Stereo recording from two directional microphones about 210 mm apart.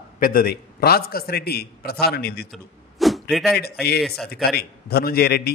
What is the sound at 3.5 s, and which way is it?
A man's voice, 50° left (ahead or behind).